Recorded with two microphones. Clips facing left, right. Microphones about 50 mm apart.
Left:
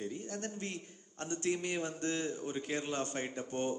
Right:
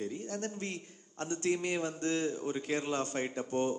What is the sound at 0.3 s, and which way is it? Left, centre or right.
A man's voice, right.